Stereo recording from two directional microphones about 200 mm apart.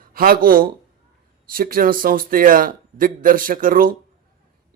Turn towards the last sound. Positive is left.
turn(degrees=-45)  # may be behind; listen again after turning